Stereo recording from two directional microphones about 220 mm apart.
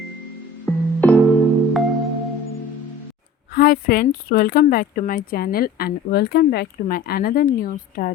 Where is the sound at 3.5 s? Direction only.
40° left (ahead or behind).